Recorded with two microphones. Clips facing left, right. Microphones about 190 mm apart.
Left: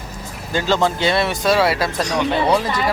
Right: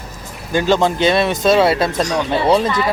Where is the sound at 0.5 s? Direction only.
15° right (ahead or behind).